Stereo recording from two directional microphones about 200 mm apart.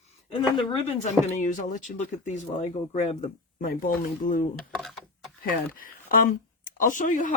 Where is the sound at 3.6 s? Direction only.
45° left (ahead or behind).